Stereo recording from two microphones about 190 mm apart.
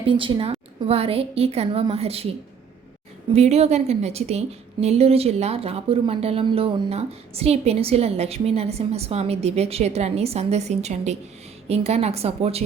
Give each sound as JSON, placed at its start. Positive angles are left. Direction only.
{"t": 0.0, "sound": "a woman's voice", "side_deg": -30}
{"t": 3.3, "sound": "a woman's voice", "side_deg": -35}